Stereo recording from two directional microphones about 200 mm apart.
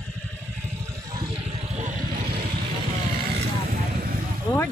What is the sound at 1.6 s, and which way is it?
Vehicle, 35° right (ahead or behind).